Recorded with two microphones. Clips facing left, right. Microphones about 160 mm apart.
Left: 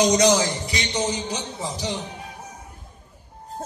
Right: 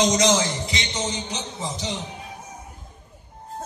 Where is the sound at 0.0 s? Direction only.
25° right (ahead or behind).